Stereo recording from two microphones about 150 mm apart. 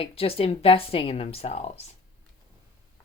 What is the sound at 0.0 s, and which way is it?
Speech, 40° left (ahead or behind).